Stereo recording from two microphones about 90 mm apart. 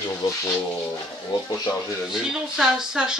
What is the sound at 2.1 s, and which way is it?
Speech, 5° right (ahead or behind).